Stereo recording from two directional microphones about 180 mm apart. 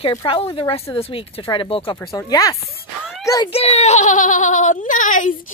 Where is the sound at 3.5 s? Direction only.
35° left (ahead or behind).